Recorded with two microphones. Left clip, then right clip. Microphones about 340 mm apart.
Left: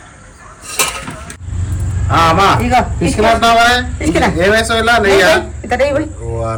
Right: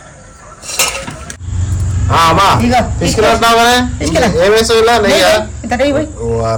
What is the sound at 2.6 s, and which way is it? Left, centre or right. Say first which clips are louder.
Speech: right 1 dB; centre.